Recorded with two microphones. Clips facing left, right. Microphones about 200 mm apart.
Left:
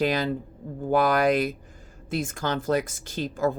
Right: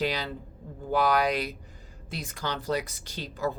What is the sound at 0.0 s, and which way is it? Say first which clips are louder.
Speech: left 6 dB; 50° left (ahead or behind).